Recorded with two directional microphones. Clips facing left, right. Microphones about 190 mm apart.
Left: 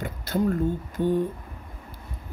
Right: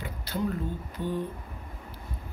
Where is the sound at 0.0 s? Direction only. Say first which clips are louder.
Left 6 dB; 45° left (ahead or behind).